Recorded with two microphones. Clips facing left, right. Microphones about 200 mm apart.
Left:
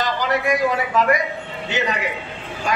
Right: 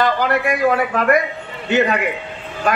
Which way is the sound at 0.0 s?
55° right (ahead or behind).